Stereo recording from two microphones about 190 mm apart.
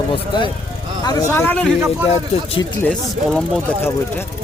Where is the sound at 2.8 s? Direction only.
5° left (ahead or behind).